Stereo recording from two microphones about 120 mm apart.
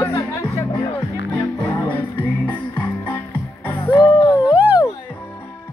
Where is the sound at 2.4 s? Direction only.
10° left (ahead or behind).